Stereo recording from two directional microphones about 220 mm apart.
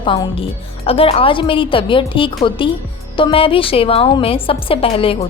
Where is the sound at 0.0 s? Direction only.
20° left (ahead or behind).